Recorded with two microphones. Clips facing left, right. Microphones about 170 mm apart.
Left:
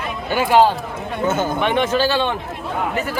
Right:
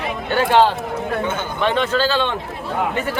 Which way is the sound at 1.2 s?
40° left (ahead or behind).